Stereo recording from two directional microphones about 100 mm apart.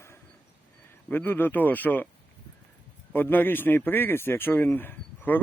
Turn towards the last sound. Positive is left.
turn(degrees=20)  # may be behind; listen again after turning